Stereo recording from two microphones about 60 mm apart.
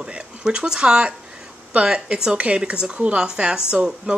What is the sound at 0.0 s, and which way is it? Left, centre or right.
Speech, centre.